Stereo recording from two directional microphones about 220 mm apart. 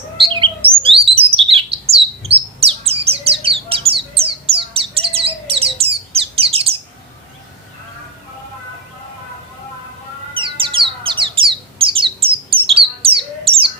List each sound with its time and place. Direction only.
0.2 s bird: 25° right (ahead or behind)
10.3 s bird: 25° right (ahead or behind)